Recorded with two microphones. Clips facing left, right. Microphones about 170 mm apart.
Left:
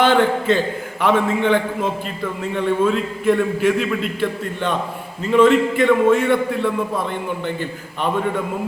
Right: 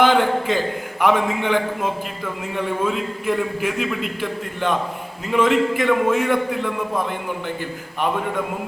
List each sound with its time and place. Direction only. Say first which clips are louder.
0.0 s a man's voice: left 1 dB; 10° right (ahead or behind)